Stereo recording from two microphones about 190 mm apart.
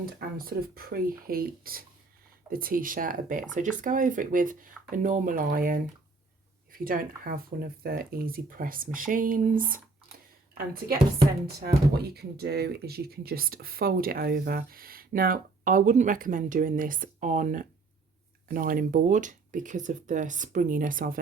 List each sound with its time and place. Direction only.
0.0 s speech: 50° right (ahead or behind)
11.6 s speech: 55° right (ahead or behind)